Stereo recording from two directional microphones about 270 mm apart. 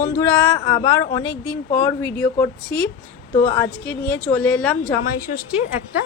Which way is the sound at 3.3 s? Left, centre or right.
Left.